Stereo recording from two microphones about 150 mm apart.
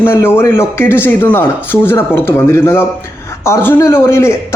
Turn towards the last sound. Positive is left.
turn(degrees=15)  # may be behind; listen again after turning